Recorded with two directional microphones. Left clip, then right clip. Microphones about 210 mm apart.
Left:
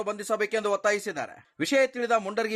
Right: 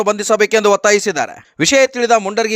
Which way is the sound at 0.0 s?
45° right (ahead or behind).